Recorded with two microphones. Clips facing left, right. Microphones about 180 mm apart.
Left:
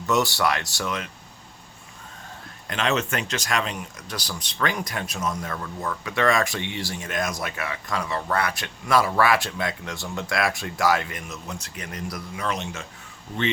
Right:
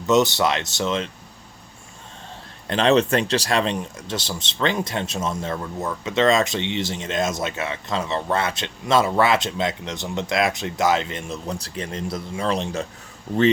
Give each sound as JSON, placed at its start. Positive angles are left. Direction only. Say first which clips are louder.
{"t": 0.1, "sound": "speech", "louder": "right 4 dB", "side_deg": -20}
{"t": 2.6, "sound": "speech", "louder": "right 7 dB", "side_deg": -30}